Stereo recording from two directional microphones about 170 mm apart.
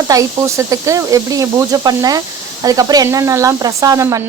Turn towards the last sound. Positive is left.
turn(degrees=-20)  # may be behind; listen again after turning